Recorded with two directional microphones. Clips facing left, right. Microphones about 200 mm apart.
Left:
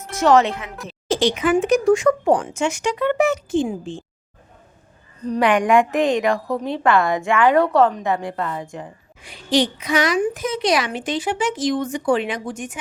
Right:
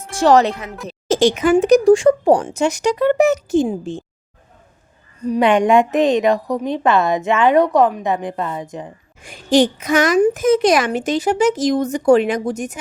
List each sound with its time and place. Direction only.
0.1 s speech: 35° right (ahead or behind)
5.4 s a woman's voice: 25° right (ahead or behind)
9.2 s a woman's voice: 45° right (ahead or behind)